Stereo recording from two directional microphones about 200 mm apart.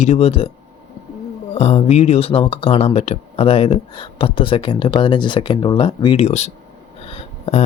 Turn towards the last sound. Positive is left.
turn(degrees=30)  # may be behind; listen again after turning